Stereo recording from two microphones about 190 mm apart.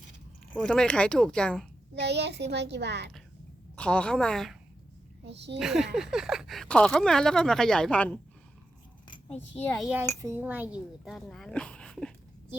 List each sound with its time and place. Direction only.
0.5 s speech: 5° left (ahead or behind)
2.0 s a child's voice: 65° right (ahead or behind)
3.8 s speech: 5° left (ahead or behind)
5.2 s a child's voice: 65° right (ahead or behind)
5.5 s speech: centre (ahead or behind)
9.7 s speech: centre (ahead or behind)
10.2 s speech: 15° right (ahead or behind); by 12.1 s 5° left (ahead or behind)